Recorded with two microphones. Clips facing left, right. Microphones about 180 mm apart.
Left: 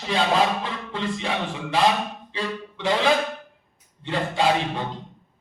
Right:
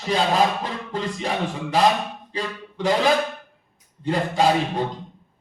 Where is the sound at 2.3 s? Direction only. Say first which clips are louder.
Right 1 dB; 40° right (ahead or behind).